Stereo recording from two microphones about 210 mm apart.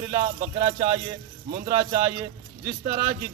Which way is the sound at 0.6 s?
25° right (ahead or behind).